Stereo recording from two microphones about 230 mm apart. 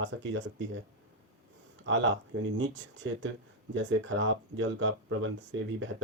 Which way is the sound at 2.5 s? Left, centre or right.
Right.